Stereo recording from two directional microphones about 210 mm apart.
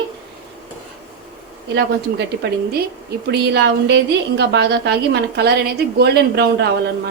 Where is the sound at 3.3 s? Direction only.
55° right (ahead or behind).